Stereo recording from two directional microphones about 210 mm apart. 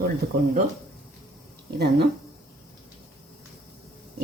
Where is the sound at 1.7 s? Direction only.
50° right (ahead or behind).